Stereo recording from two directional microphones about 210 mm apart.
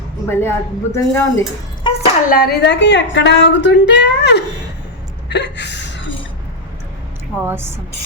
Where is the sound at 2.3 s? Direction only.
45° left (ahead or behind).